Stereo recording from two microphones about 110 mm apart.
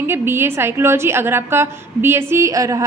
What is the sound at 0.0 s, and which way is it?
A woman's voice, 20° right (ahead or behind).